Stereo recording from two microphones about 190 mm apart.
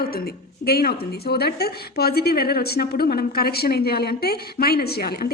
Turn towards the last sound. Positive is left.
turn(degrees=55)  # may be behind; listen again after turning